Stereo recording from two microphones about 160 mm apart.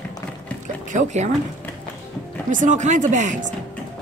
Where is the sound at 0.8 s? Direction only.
50° right (ahead or behind).